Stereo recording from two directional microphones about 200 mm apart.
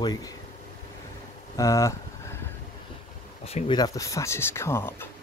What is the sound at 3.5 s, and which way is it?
Speech, 30° left (ahead or behind).